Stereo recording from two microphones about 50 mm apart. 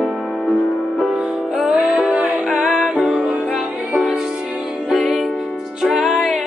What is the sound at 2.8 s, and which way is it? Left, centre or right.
Music, centre.